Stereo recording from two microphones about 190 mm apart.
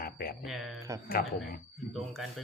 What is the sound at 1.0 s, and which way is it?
Speech, 50° left (ahead or behind).